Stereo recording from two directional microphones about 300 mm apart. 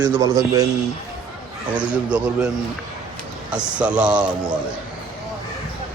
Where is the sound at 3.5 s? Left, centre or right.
Centre.